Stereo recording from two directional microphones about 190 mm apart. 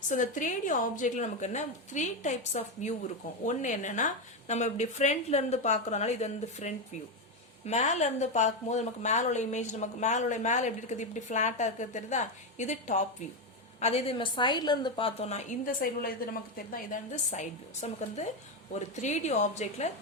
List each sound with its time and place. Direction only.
0.1 s speech: 40° left (ahead or behind)